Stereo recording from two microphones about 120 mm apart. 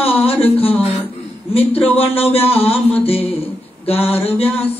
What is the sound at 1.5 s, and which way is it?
Speech, 55° left (ahead or behind).